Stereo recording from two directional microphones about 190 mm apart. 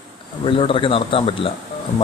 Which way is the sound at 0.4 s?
25° left (ahead or behind).